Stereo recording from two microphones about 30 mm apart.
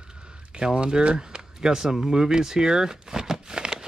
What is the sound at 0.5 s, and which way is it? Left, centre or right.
Speech, right.